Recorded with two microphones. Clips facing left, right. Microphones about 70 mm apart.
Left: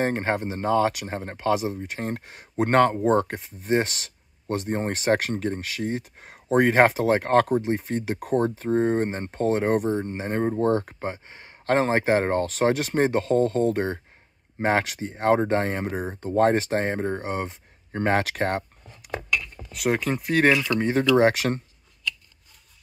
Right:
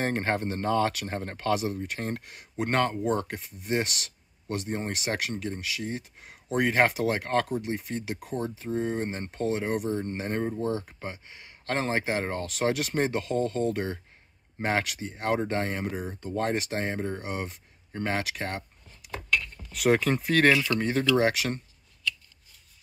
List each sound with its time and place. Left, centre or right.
0.0 s speech: left
9.9 s speech: left
10.5 s speech: left
11.1 s speech: left
19.3 s a sound: centre
19.7 s speech: centre
20.8 s speech: left